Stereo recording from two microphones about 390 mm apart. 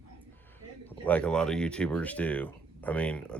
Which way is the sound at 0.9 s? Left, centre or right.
Centre.